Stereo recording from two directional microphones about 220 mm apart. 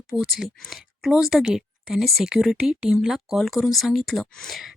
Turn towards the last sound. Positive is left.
turn(degrees=0)  # may be behind; listen again after turning